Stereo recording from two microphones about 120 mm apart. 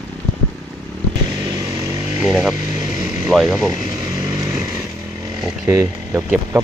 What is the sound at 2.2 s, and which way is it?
Motorcycle, 5° right (ahead or behind).